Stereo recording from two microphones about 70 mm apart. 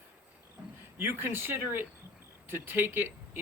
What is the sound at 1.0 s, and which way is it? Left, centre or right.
Speech, right.